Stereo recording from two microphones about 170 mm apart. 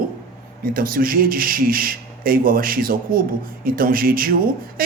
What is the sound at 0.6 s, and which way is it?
Speech, 55° right (ahead or behind).